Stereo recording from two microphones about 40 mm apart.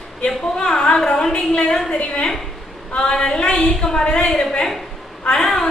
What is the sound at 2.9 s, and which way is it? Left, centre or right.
A woman's voice, left.